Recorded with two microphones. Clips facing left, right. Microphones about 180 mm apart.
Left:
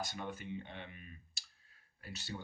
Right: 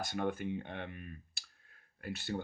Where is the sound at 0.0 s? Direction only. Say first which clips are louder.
Right 7 dB; 55° right (ahead or behind).